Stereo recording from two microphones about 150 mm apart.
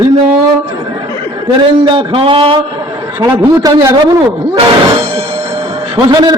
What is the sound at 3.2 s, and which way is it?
Speech, 20° right (ahead or behind).